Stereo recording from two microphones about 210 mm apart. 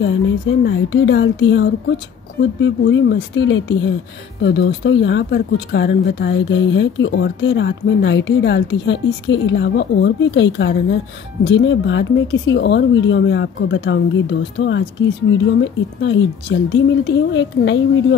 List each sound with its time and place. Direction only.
0.7 s speech: 60° left (ahead or behind)